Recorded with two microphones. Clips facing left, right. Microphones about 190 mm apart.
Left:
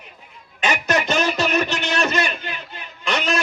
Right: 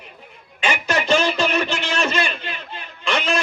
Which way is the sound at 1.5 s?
40° left (ahead or behind).